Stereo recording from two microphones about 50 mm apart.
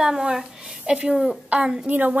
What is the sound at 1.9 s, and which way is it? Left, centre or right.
Speech, right.